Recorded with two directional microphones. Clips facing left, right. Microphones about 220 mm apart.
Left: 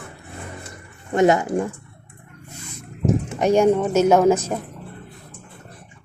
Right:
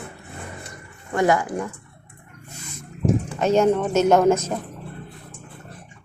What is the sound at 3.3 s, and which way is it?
A woman's voice, 15° left (ahead or behind).